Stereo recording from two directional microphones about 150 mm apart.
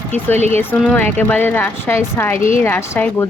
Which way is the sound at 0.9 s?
10° left (ahead or behind).